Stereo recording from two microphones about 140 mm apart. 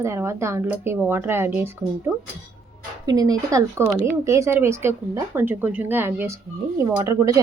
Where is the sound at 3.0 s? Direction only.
25° right (ahead or behind).